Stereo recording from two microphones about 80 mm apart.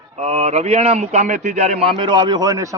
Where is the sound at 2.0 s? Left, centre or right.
Right.